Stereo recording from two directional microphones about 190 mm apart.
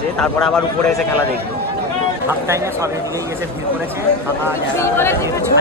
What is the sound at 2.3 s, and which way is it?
Speech, 15° right (ahead or behind).